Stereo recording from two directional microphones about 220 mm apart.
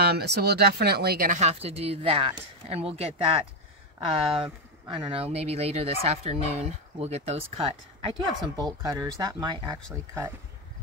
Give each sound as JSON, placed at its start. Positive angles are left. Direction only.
{"t": 0.0, "sound": "speech", "side_deg": -45}